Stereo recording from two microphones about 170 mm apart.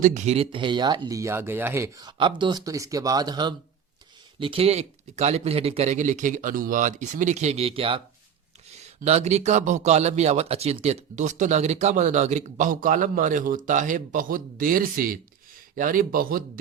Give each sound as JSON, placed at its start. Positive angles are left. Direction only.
{"t": 0.0, "sound": "a man's voice", "side_deg": -45}